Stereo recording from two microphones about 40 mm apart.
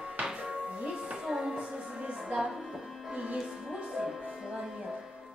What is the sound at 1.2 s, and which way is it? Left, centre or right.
Music, centre.